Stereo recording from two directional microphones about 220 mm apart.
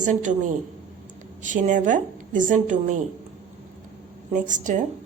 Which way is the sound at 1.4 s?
35° right (ahead or behind).